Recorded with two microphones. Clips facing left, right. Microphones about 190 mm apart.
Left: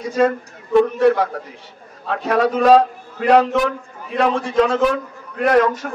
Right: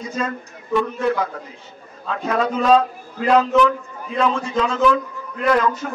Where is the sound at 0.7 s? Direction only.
55° left (ahead or behind).